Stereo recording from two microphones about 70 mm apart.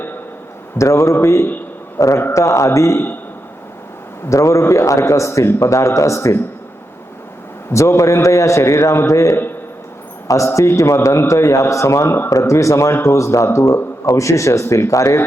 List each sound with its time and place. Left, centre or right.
0.8 s a man's voice: left
4.3 s a man's voice: left
7.7 s a man's voice: left